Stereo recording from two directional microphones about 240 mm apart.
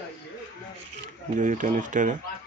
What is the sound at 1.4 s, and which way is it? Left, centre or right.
Speech, right.